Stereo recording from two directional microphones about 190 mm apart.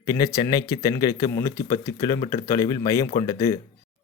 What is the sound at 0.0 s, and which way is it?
Speech, 20° left (ahead or behind).